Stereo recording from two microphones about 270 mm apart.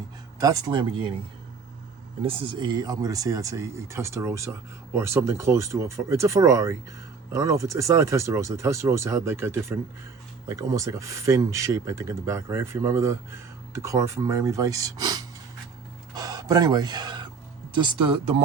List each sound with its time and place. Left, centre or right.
0.3 s speech: centre
2.2 s speech: centre
16.1 s a sound: centre
17.7 s speech: centre